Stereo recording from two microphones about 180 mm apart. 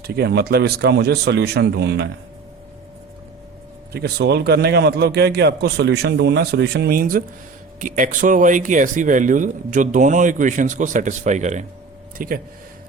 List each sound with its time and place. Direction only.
0.0 s a man's voice: 60° right (ahead or behind)
3.9 s a man's voice: 65° right (ahead or behind); by 11.6 s 40° right (ahead or behind)
12.1 s speech: 50° right (ahead or behind)